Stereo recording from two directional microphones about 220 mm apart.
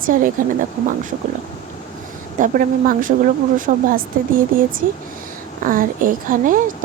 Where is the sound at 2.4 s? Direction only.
40° right (ahead or behind).